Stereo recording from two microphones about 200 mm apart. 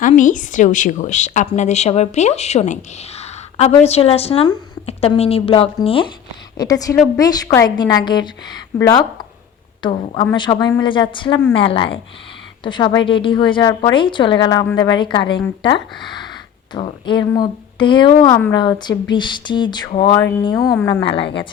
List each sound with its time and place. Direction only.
0.0 s a woman's voice: 40° left (ahead or behind); by 15.4 s 25° left (ahead or behind)
16.0 s a sound: 20° left (ahead or behind)
16.7 s a woman's voice: 25° left (ahead or behind)